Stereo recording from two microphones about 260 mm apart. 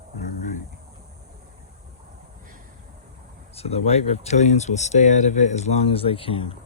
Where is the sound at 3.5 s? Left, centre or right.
Left.